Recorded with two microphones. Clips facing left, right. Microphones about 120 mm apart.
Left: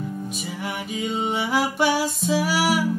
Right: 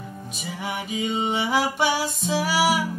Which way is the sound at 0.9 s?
Centre (ahead or behind).